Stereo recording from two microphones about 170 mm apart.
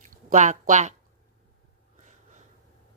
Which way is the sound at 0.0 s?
50° right (ahead or behind).